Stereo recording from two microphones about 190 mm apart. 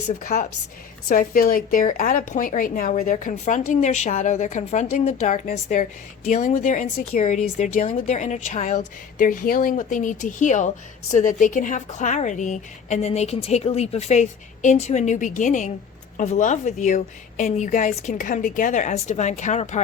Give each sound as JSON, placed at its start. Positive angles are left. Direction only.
{"t": 0.2, "sound": "a woman's voice", "side_deg": 45}